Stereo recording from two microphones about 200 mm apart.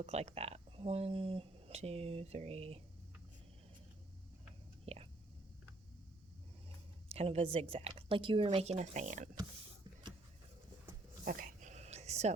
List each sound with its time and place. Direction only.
0.0 s speech: 30° right (ahead or behind)
4.9 s speech: 30° right (ahead or behind)
7.1 s speech: 30° right (ahead or behind)
11.3 s a sound: 45° right (ahead or behind)